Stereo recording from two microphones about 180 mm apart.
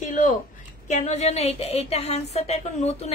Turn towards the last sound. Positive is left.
turn(degrees=35)  # may be behind; listen again after turning